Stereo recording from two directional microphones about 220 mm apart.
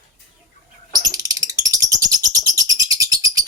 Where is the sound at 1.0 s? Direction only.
15° right (ahead or behind).